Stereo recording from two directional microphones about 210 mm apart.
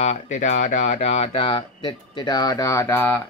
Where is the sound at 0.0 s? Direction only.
35° left (ahead or behind).